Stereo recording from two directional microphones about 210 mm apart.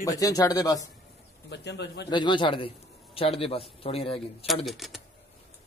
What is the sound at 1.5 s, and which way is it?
Speech, 55° left (ahead or behind).